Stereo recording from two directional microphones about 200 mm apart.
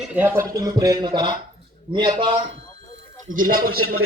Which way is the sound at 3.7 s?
90° right.